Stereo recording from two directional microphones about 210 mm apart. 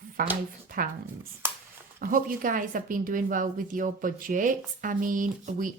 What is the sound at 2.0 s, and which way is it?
A woman's voice, 40° right (ahead or behind).